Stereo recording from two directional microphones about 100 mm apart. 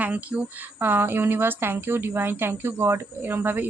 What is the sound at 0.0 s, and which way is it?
A woman's voice, 15° right (ahead or behind).